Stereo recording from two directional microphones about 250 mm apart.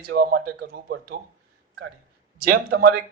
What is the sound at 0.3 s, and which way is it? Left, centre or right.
Speech, right.